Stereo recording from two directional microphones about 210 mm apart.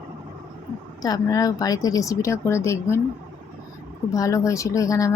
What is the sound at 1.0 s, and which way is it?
Speech, 15° left (ahead or behind).